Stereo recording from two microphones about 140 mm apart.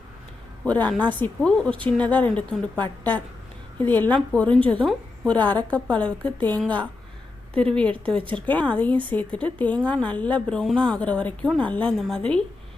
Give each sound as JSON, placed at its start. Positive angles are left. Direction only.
{"t": 0.6, "sound": "a woman's voice", "side_deg": 10}
{"t": 8.2, "sound": "speech", "side_deg": -35}
{"t": 8.4, "sound": "a woman's voice", "side_deg": 10}